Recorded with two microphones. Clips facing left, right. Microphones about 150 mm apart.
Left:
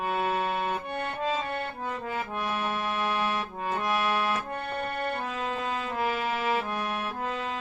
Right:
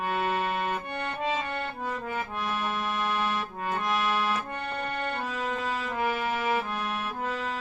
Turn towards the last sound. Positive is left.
turn(degrees=-10)  # may be behind; listen again after turning